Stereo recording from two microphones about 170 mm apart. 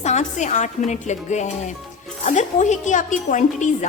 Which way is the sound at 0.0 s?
45° left (ahead or behind).